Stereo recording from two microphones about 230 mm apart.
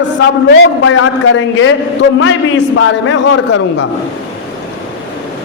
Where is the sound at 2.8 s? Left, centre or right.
Left.